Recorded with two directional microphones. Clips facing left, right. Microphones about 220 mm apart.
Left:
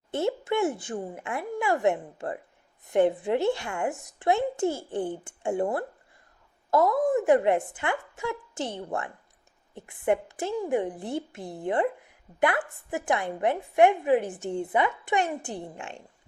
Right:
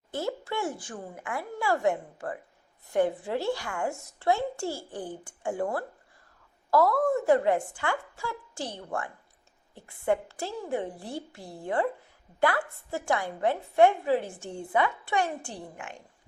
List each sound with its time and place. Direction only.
0.1 s a woman's voice: 25° left (ahead or behind)